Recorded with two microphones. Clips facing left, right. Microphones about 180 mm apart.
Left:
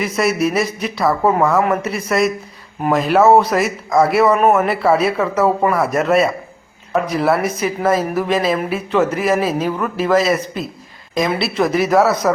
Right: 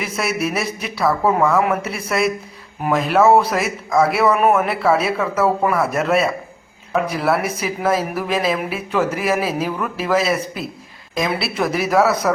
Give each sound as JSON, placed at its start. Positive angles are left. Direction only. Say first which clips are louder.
{"t": 0.2, "sound": "speech", "louder": "left 5 dB", "side_deg": 0}